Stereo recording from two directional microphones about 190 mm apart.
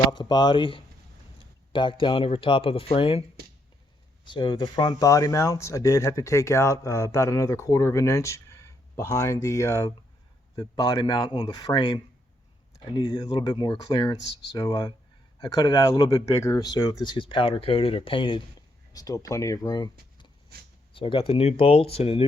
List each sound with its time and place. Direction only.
0.1 s speech: 25° left (ahead or behind)